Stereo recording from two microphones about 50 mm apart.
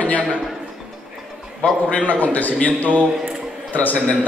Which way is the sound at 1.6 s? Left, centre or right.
Left.